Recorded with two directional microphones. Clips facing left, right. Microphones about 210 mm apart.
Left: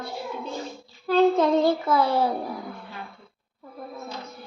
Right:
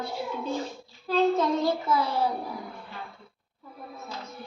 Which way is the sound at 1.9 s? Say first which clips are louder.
Left 3 dB; 60° left (ahead or behind).